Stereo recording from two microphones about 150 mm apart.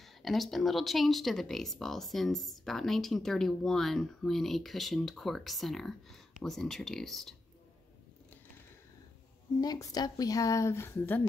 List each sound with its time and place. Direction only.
0.0 s speech: centre (ahead or behind)
9.6 s speech: 25° left (ahead or behind)